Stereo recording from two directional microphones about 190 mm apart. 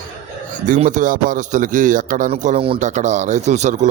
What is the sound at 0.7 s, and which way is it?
Speech, 40° right (ahead or behind).